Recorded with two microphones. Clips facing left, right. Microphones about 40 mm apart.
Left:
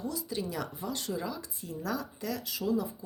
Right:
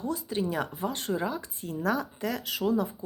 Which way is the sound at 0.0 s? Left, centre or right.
Right.